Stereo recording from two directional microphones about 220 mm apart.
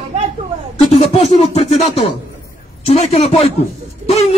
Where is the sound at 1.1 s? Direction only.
30° left (ahead or behind).